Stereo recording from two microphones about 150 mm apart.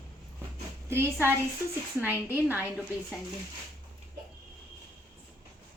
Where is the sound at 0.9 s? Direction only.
15° right (ahead or behind).